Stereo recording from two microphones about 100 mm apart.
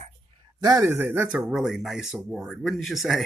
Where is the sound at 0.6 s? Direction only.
40° right (ahead or behind).